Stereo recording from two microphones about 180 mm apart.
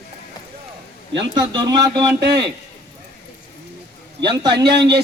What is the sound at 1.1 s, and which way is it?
Speech, 25° right (ahead or behind).